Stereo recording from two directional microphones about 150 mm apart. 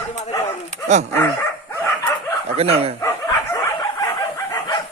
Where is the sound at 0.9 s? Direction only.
50° right (ahead or behind).